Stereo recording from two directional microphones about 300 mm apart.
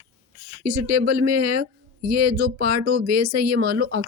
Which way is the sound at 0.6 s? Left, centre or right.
Right.